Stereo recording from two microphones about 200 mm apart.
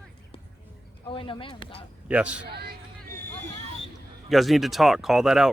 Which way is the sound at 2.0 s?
5° right (ahead or behind).